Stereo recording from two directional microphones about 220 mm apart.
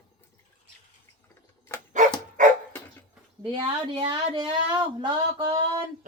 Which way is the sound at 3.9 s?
20° right (ahead or behind).